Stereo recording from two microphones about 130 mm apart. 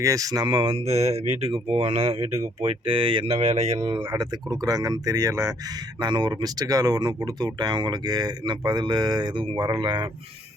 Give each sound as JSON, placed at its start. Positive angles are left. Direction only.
{"t": 0.0, "sound": "speech", "side_deg": -25}
{"t": 3.8, "sound": "speech", "side_deg": -35}